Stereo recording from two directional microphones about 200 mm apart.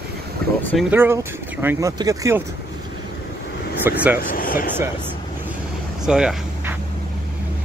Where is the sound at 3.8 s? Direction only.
10° right (ahead or behind).